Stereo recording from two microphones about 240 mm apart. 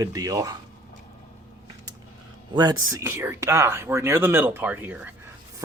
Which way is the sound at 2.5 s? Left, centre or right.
Centre.